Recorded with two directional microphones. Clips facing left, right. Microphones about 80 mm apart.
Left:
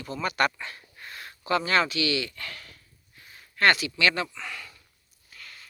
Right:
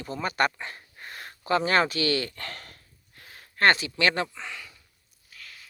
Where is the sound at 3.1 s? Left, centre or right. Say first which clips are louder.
Right 2 dB; right.